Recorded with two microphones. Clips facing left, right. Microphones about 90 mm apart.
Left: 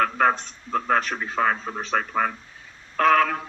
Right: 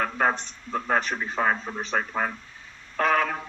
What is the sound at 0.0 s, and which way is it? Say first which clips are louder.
A man's voice: left 4 dB; 10° right (ahead or behind).